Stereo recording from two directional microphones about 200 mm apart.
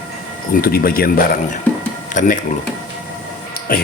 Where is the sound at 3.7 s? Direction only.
45° left (ahead or behind).